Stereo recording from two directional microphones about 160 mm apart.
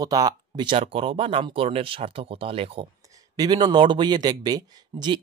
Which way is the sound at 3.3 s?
25° right (ahead or behind).